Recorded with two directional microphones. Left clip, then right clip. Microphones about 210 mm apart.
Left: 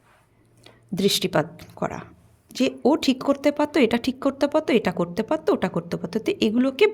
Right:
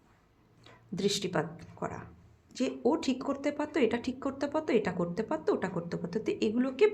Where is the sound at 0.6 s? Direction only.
35° left (ahead or behind).